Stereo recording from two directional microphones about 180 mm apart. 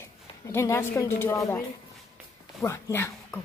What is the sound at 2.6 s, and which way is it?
Speech, 15° left (ahead or behind).